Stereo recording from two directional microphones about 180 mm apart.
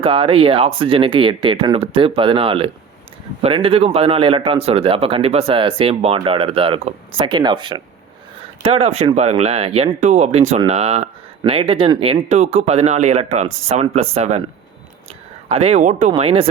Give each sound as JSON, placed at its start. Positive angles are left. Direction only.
{"t": 0.0, "sound": "a man's voice", "side_deg": -30}
{"t": 15.4, "sound": "a man's voice", "side_deg": -35}